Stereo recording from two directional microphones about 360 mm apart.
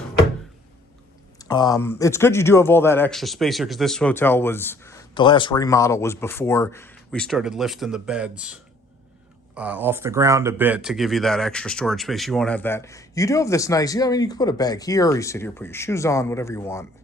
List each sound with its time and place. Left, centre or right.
1.4 s speech: centre
9.6 s speech: centre